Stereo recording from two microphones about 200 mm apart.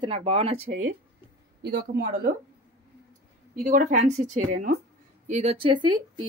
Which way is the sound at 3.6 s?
40° right (ahead or behind).